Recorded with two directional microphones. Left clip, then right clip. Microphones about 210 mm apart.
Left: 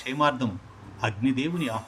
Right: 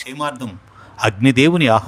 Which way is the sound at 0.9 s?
55° right (ahead or behind).